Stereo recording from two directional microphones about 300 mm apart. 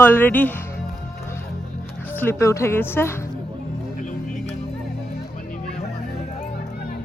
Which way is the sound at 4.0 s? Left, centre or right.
Left.